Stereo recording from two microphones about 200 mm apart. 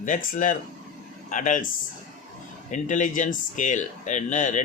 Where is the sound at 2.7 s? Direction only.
40° left (ahead or behind).